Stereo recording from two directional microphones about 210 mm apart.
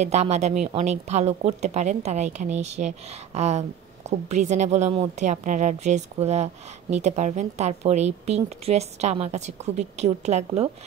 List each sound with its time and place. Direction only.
0.0 s a woman's voice: 30° right (ahead or behind)